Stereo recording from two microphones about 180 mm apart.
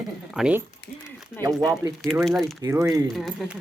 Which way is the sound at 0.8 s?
70° left (ahead or behind).